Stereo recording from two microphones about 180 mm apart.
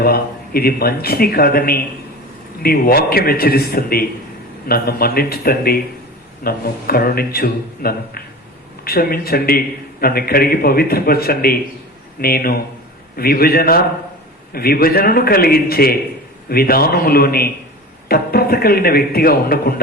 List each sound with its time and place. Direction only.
0.0 s a man's voice: 60° left (ahead or behind)